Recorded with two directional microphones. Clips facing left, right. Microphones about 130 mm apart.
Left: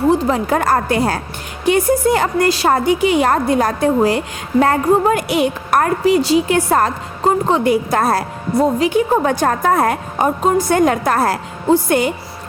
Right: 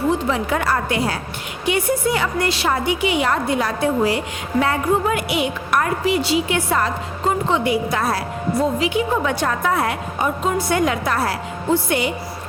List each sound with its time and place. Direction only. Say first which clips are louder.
0.1 s a woman's voice: left 5 dB; 40° left (ahead or behind)